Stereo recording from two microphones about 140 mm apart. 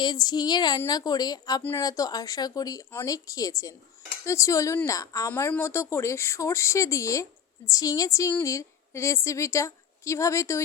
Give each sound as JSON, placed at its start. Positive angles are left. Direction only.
{"t": 0.0, "sound": "a woman's voice", "side_deg": 30}
{"t": 5.3, "sound": "a woman's voice", "side_deg": 15}